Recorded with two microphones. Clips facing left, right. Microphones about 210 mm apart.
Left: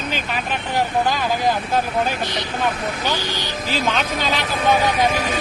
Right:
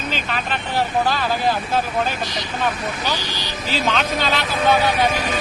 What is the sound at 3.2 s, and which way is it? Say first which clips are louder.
Speech: left 3 dB; 55° left (ahead or behind).